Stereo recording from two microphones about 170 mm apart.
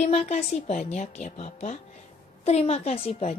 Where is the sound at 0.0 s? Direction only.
40° left (ahead or behind).